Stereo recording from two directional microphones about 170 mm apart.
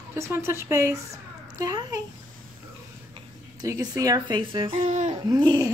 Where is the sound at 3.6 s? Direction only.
20° right (ahead or behind).